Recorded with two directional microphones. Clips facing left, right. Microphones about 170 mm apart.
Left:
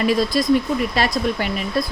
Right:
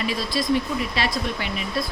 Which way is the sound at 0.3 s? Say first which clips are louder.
Left 5 dB; 45° left (ahead or behind).